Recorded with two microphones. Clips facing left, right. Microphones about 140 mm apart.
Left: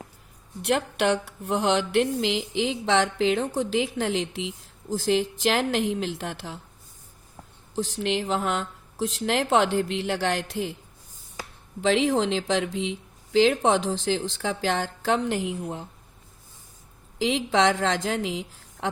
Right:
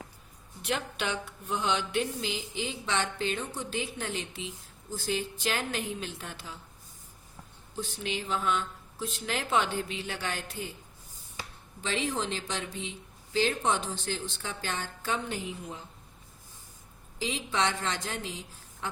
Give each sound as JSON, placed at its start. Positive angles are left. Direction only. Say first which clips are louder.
{"t": 0.6, "sound": "a woman's voice", "louder": "left 9 dB", "side_deg": 70}
{"t": 1.5, "sound": "mantra", "louder": "left 7 dB", "side_deg": 75}
{"t": 7.8, "sound": "a woman's voice", "louder": "left 9 dB", "side_deg": 90}
{"t": 11.8, "sound": "mantra", "louder": "left 10 dB", "side_deg": 90}
{"t": 17.2, "sound": "mantra", "louder": "left 8 dB", "side_deg": 90}